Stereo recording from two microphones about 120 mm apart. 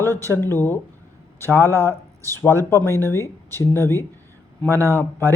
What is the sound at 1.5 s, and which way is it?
Speech, 20° right (ahead or behind).